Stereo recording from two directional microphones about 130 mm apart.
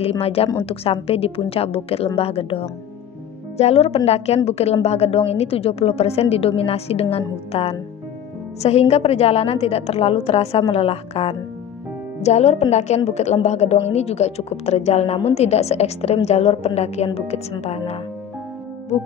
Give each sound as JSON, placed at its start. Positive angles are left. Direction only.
{"t": 0.0, "sound": "a woman's voice", "side_deg": 50}